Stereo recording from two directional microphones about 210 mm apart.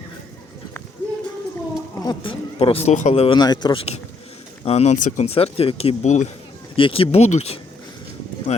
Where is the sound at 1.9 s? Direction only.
20° left (ahead or behind).